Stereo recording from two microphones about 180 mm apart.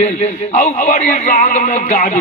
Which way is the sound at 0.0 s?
40° left (ahead or behind).